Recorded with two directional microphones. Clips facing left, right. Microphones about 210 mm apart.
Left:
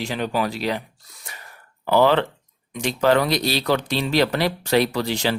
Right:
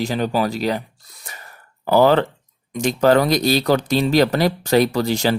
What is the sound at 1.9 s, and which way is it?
Speech, 40° right (ahead or behind).